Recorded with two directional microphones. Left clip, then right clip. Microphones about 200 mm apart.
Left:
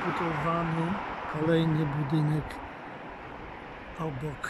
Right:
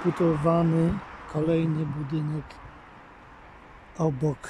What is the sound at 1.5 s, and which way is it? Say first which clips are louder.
Speech: left 1 dB; 10° right (ahead or behind).